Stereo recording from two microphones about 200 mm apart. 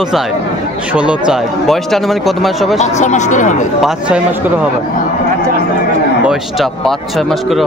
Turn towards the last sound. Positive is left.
turn(degrees=0)  # may be behind; listen again after turning